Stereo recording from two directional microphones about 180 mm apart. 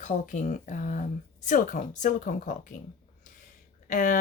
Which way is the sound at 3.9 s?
45° left (ahead or behind).